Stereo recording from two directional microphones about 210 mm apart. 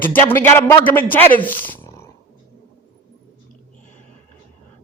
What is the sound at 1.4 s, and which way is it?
Purr, 10° left (ahead or behind).